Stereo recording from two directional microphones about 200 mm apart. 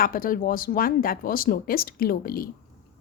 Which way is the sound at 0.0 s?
45° left (ahead or behind).